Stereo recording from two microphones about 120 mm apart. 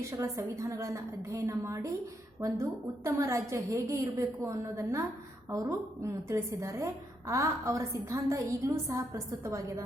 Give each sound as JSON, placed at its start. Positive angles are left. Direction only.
{"t": 0.0, "sound": "a woman's voice", "side_deg": -25}